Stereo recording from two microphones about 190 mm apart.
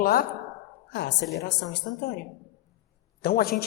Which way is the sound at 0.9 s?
65° left (ahead or behind).